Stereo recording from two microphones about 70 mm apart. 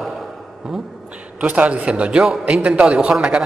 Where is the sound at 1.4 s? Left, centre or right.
Centre.